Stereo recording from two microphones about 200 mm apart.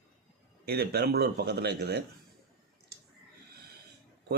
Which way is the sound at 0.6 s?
55° right (ahead or behind).